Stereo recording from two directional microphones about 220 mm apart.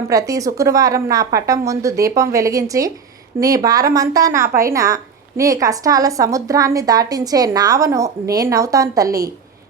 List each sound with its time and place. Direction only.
0.1 s a woman's voice: 15° right (ahead or behind)